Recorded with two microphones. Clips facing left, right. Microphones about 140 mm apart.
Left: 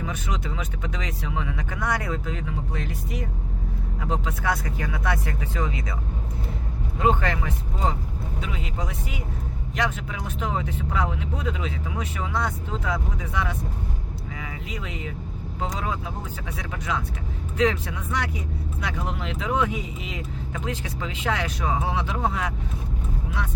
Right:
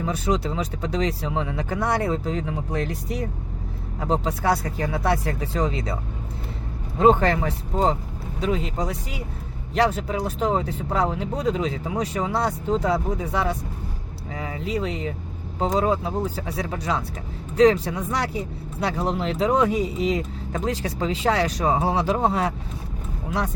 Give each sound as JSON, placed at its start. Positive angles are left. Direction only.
{"t": 0.0, "sound": "speech", "side_deg": -35}
{"t": 7.0, "sound": "speech", "side_deg": -35}